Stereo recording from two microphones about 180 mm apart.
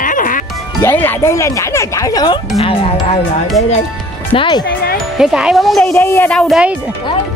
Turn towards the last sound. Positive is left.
turn(degrees=0)  # may be behind; listen again after turning